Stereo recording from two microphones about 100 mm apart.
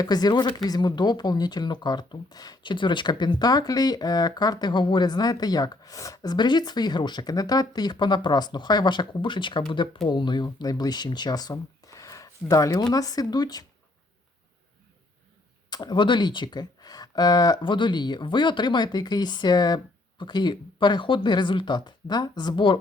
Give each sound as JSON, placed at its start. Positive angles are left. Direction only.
{"t": 0.0, "sound": "speech", "side_deg": 40}
{"t": 15.7, "sound": "speech", "side_deg": 45}